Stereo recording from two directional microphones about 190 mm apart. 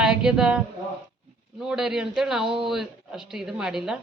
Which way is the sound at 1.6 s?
5° right (ahead or behind).